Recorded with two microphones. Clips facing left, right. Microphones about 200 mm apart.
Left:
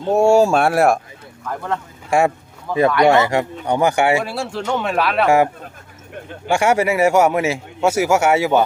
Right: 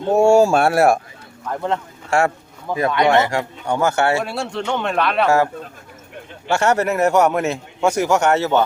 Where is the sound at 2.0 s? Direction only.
15° left (ahead or behind).